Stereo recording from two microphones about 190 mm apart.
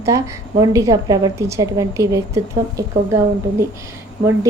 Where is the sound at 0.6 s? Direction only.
15° right (ahead or behind).